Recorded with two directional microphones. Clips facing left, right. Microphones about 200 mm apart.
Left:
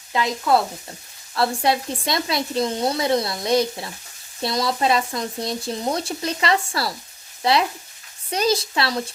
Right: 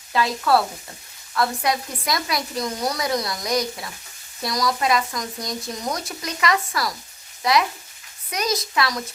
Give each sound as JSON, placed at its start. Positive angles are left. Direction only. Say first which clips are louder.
{"t": 0.1, "sound": "speech", "louder": "even", "side_deg": 20}
{"t": 1.3, "sound": "speech", "louder": "left 2 dB", "side_deg": 30}